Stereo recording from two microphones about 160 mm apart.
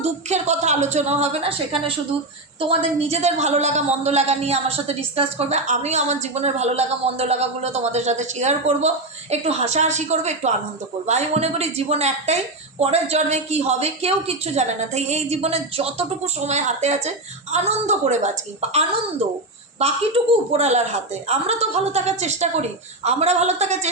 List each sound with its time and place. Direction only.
0.0 s a woman's voice: 45° right (ahead or behind)
19.8 s a woman's voice: 35° right (ahead or behind)